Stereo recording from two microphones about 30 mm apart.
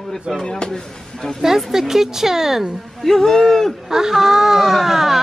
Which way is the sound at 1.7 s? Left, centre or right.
Centre.